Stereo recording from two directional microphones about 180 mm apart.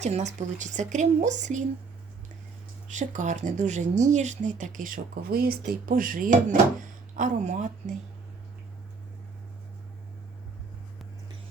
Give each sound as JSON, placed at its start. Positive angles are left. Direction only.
{"t": 0.0, "sound": "a woman's voice", "side_deg": -40}
{"t": 2.9, "sound": "speech", "side_deg": -45}